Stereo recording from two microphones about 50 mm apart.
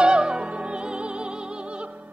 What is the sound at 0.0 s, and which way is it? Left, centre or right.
Music, centre.